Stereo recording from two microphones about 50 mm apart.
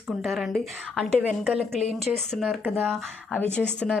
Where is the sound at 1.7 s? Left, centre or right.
Centre.